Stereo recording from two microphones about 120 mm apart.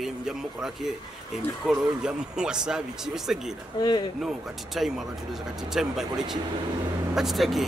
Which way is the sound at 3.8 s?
35° left (ahead or behind).